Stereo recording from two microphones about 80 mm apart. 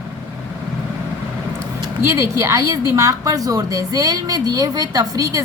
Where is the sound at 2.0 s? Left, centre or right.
Right.